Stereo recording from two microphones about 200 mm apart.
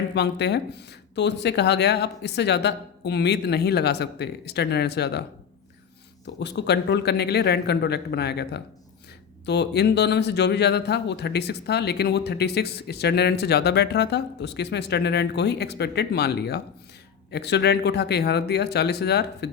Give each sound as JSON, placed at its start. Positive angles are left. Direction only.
{"t": 0.1, "sound": "a man's voice", "side_deg": 55}
{"t": 6.2, "sound": "a man's voice", "side_deg": 60}